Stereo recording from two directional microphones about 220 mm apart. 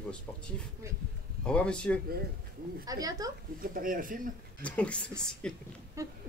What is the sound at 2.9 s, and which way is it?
Speech, 15° right (ahead or behind).